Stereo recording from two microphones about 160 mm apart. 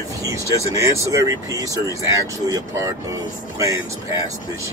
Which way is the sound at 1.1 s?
20° right (ahead or behind).